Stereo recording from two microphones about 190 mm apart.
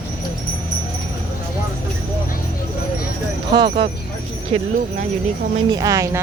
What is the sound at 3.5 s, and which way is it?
Speech, 25° right (ahead or behind).